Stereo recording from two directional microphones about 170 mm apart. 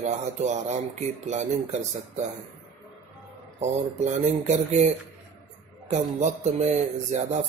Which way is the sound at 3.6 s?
45° right (ahead or behind).